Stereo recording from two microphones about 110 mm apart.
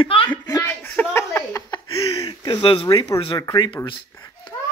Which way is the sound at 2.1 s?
35° left (ahead or behind).